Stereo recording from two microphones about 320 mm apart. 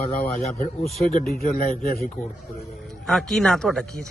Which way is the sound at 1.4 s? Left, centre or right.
Left.